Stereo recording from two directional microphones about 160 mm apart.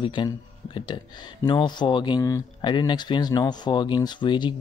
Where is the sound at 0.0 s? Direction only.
30° left (ahead or behind).